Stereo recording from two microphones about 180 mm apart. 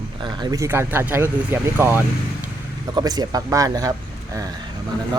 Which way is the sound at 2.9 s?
20° right (ahead or behind).